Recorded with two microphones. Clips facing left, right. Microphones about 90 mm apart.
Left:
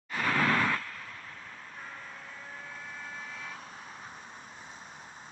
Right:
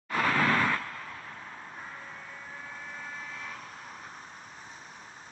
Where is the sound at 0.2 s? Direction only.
65° right (ahead or behind).